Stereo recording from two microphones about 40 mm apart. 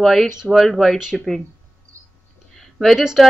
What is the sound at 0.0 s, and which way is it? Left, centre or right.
Speech, centre.